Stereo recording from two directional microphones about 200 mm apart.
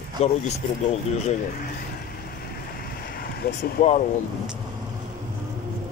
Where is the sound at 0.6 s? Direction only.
45° left (ahead or behind).